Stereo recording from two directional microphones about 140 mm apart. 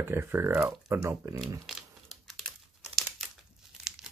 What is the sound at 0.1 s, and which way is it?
Speech, 20° right (ahead or behind).